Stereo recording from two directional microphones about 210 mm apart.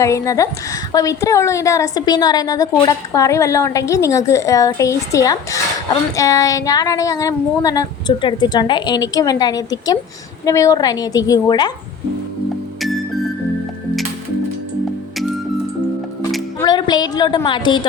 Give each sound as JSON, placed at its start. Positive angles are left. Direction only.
{"t": 0.0, "sound": "a woman's voice", "side_deg": 15}
{"t": 16.6, "sound": "a woman's voice", "side_deg": 20}